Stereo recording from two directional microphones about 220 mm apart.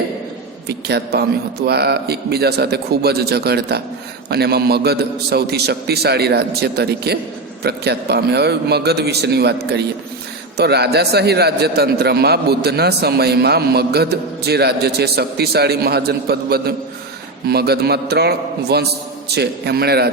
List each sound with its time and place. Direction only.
0.7 s a man's voice: 50° right (ahead or behind)